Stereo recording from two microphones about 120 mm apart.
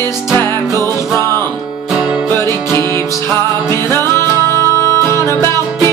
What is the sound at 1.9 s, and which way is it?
Music, 5° right (ahead or behind).